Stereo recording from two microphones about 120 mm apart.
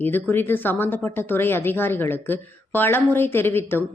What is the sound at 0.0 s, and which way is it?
Speech, 15° left (ahead or behind).